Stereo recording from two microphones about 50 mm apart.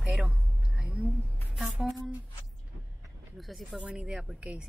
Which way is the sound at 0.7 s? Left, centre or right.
Right.